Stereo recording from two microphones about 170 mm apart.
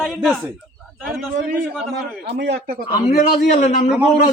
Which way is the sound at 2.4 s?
85° right.